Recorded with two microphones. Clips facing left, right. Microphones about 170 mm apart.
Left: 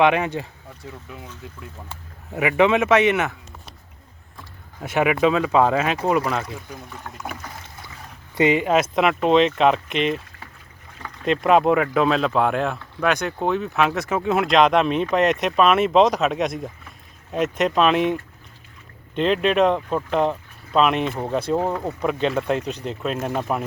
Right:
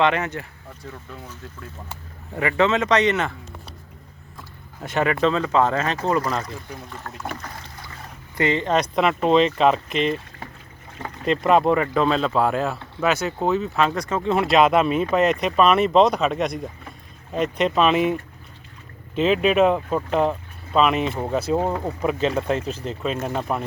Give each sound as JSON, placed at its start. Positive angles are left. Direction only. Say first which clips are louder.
{"t": 0.0, "sound": "speech", "louder": "left 3 dB", "side_deg": 15}
{"t": 2.3, "sound": "speech", "louder": "left 2 dB", "side_deg": 10}
{"t": 4.8, "sound": "speech", "louder": "left 2 dB", "side_deg": 10}
{"t": 8.4, "sound": "speech", "louder": "left 3 dB", "side_deg": 15}
{"t": 10.9, "sound": "boat", "louder": "right 4 dB", "side_deg": -30}
{"t": 11.3, "sound": "speech", "louder": "left 1 dB", "side_deg": 0}